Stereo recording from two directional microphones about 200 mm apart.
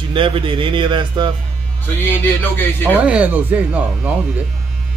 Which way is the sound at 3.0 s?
5° right (ahead or behind).